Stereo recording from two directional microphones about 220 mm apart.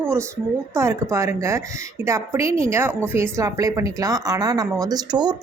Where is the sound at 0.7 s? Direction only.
15° right (ahead or behind).